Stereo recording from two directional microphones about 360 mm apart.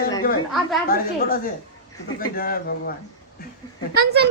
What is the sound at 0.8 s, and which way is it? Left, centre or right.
Speech, left.